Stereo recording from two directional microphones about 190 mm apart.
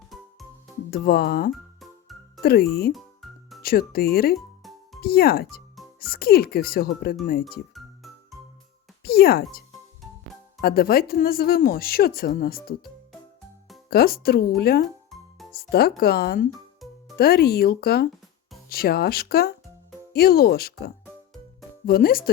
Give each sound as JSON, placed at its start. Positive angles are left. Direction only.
{"t": 0.1, "sound": "music", "side_deg": 0}
{"t": 0.9, "sound": "speech", "side_deg": 55}
{"t": 1.8, "sound": "music", "side_deg": 0}
{"t": 2.4, "sound": "speech", "side_deg": 55}
{"t": 2.9, "sound": "music", "side_deg": 0}
{"t": 3.6, "sound": "speech", "side_deg": 50}
{"t": 4.4, "sound": "music", "side_deg": 0}
{"t": 4.9, "sound": "speech", "side_deg": 55}
{"t": 7.7, "sound": "music", "side_deg": 0}
{"t": 9.0, "sound": "speech", "side_deg": 55}
{"t": 13.9, "sound": "speech", "side_deg": 50}
{"t": 16.8, "sound": "music", "side_deg": 0}
{"t": 17.2, "sound": "speech", "side_deg": 55}